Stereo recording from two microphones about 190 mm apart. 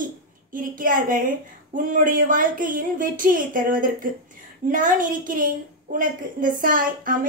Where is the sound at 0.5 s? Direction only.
45° right (ahead or behind).